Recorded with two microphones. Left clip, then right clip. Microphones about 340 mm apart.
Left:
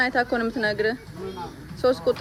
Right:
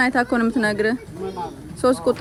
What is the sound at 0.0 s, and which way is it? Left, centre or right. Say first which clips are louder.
Speech: right 3 dB; centre.